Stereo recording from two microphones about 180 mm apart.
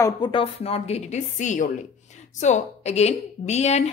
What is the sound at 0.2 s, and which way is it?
A woman's voice, 30° left (ahead or behind).